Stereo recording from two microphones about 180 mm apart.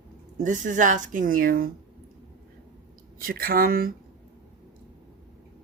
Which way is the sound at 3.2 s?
55° right (ahead or behind).